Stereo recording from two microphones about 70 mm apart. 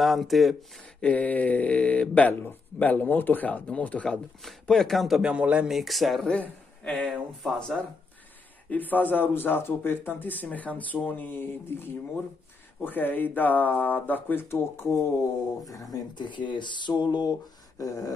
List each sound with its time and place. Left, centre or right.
0.0 s speech: centre
1.0 s speech: left
4.6 s speech: centre
5.2 s a man's voice: centre
5.7 s speech: centre
6.2 s a man's voice: centre
7.5 s speech: centre
8.6 s speech: left
14.5 s speech: left
15.6 s speech: left
17.7 s a sound: left